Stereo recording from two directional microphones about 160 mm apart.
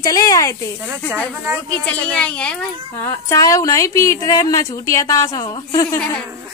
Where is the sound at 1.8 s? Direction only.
10° left (ahead or behind).